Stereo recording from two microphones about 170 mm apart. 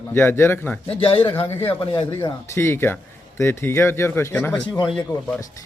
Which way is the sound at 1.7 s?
30° left (ahead or behind).